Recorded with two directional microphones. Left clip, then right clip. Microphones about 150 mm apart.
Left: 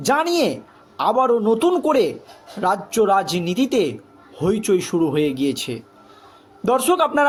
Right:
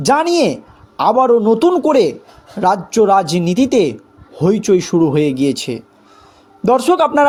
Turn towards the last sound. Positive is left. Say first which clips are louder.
# right 5 dB
turn(degrees=-35)  # may be behind; listen again after turning